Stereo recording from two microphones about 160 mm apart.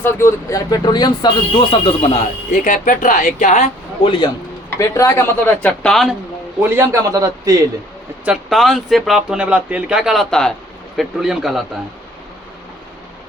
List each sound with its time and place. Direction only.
0.0 s speech: 15° left (ahead or behind); by 2.2 s 35° left (ahead or behind)
2.5 s speech: 50° left (ahead or behind)
4.8 s speech: 20° left (ahead or behind)
5.6 s speech: 5° left (ahead or behind)
6.6 s a man's voice: 15° right (ahead or behind)
8.2 s speech: 5° right (ahead or behind)